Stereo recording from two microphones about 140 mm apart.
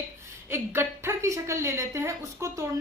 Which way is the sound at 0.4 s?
15° right (ahead or behind).